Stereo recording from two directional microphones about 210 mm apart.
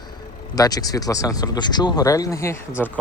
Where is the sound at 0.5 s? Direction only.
15° left (ahead or behind).